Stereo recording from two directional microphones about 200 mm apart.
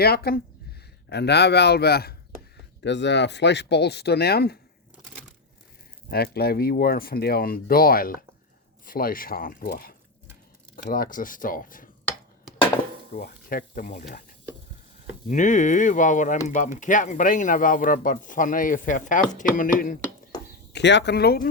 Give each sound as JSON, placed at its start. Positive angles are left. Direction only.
{"t": 0.0, "sound": "speech", "side_deg": 50}
{"t": 6.1, "sound": "speech", "side_deg": 50}
{"t": 13.1, "sound": "speech", "side_deg": 45}
{"t": 15.3, "sound": "speech", "side_deg": 40}
{"t": 20.7, "sound": "speech", "side_deg": 60}